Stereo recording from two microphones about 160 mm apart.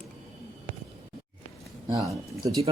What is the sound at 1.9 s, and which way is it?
Speech, 20° right (ahead or behind).